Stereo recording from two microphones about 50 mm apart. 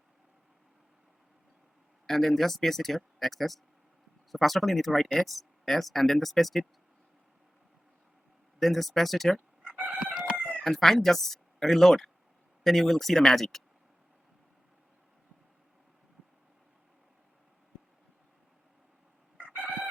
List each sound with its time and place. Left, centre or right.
2.0 s speech: centre
8.5 s speech: centre
9.6 s chicken: right
10.6 s speech: centre
19.5 s chicken: right